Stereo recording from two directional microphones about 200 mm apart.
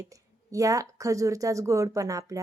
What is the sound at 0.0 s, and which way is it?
Speech, 15° right (ahead or behind).